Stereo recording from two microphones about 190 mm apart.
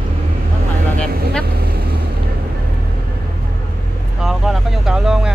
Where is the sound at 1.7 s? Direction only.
55° right (ahead or behind).